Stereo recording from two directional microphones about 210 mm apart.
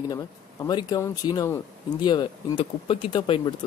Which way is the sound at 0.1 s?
20° left (ahead or behind).